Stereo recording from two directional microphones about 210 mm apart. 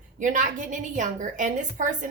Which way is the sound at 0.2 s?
40° right (ahead or behind).